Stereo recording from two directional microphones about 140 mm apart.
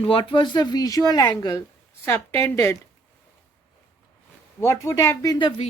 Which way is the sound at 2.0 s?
15° left (ahead or behind).